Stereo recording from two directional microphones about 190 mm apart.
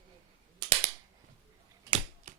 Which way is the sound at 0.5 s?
30° right (ahead or behind).